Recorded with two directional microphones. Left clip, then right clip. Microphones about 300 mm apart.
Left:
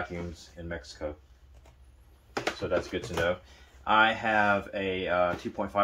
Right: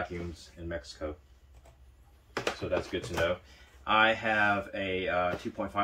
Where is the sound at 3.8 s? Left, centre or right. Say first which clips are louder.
Left 2 dB; centre.